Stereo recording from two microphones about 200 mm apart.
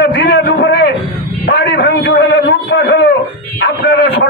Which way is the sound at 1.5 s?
60° left (ahead or behind).